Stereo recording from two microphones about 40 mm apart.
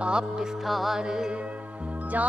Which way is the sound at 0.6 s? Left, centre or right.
Centre.